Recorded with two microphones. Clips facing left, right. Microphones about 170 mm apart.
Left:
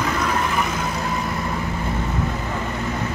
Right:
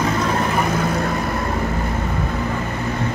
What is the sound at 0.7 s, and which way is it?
Vehicle, 55° right (ahead or behind).